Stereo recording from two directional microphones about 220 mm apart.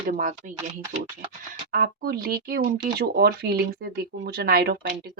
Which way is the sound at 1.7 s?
40° right (ahead or behind).